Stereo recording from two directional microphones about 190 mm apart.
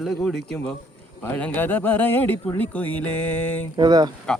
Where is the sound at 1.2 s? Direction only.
10° left (ahead or behind).